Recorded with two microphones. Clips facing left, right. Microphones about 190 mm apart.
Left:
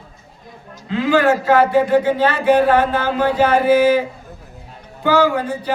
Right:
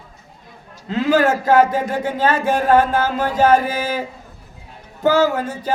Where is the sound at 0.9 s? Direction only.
40° right (ahead or behind).